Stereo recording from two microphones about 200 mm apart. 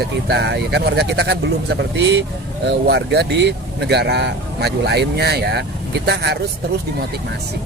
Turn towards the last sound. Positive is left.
turn(degrees=-55)  # may be behind; listen again after turning